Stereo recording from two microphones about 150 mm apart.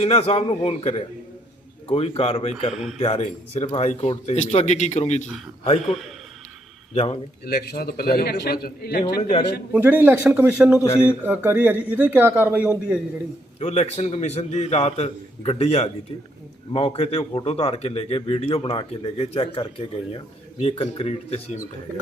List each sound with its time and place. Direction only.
0.0 s a man's voice: 40° left (ahead or behind)
6.9 s a man's voice: 45° left (ahead or behind)
7.4 s a man's voice: 90° left
9.7 s speech: 15° right (ahead or behind)
13.6 s a man's voice: 45° left (ahead or behind)